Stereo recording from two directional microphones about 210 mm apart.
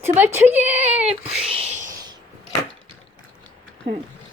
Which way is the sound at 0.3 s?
10° right (ahead or behind).